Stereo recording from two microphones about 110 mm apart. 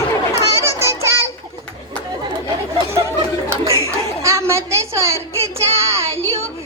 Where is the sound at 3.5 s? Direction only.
30° right (ahead or behind).